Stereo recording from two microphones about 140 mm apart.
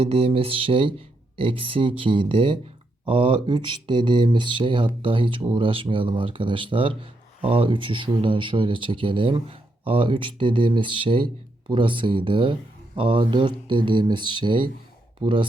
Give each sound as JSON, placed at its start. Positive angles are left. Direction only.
{"t": 0.0, "sound": "speech", "side_deg": -45}